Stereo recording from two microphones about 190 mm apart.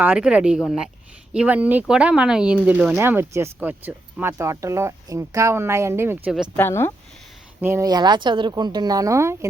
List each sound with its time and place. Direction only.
0.0 s speech: 5° right (ahead or behind)
6.6 s speech: 10° left (ahead or behind)
7.6 s speech: 15° right (ahead or behind)